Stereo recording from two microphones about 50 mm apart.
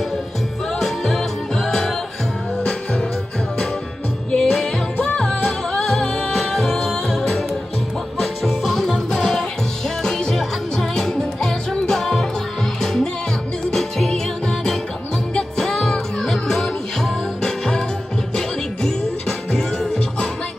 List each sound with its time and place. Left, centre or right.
0.7 s music: centre
4.3 s music: centre